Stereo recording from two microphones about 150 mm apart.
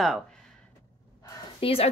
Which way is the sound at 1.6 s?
40° left (ahead or behind).